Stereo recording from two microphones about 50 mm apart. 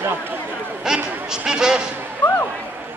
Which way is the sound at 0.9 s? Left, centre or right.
Centre.